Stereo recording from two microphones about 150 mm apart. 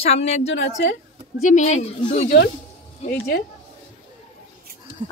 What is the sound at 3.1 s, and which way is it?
Speech, 90° left.